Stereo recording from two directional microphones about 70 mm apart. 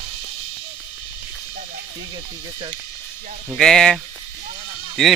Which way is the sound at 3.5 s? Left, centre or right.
Centre.